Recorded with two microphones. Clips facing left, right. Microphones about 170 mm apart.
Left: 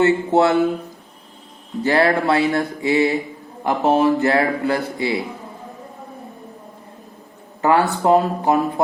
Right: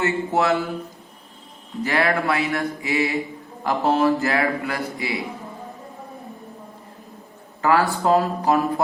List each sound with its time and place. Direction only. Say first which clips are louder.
0.0 s a man's voice: left 6 dB; 25° left (ahead or behind)
1.8 s a man's voice: left 5 dB; 30° left (ahead or behind)
7.6 s a man's voice: left 3 dB; 20° left (ahead or behind)